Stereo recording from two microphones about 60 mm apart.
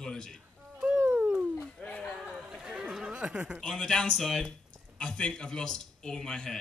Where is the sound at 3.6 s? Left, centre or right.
Centre.